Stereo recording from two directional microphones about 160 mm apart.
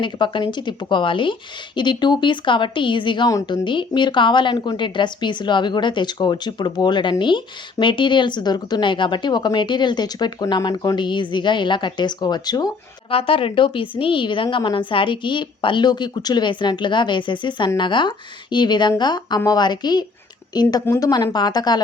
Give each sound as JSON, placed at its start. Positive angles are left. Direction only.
{"t": 0.0, "sound": "speech", "side_deg": 30}
{"t": 13.1, "sound": "a woman's voice", "side_deg": 35}